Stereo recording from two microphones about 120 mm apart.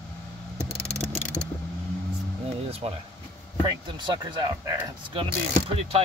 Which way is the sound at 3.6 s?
40° right (ahead or behind).